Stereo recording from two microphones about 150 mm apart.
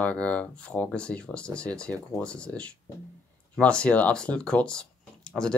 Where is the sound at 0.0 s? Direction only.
10° left (ahead or behind).